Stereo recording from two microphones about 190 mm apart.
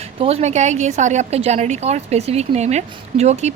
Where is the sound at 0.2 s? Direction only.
30° right (ahead or behind).